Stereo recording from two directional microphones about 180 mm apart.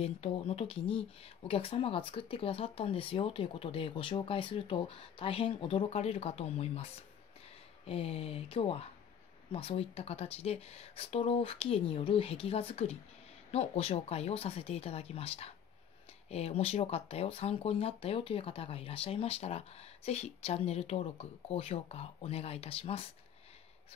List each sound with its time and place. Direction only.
0.0 s speech: 30° left (ahead or behind)